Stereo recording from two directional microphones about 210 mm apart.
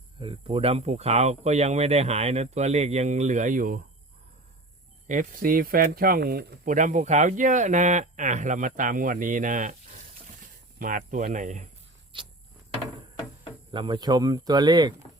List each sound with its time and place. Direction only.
0.2 s speech: 25° right (ahead or behind); by 3.8 s 40° right (ahead or behind)
5.0 s speech: 40° right (ahead or behind)
12.1 s a sound: 25° right (ahead or behind)
13.7 s speech: 20° right (ahead or behind)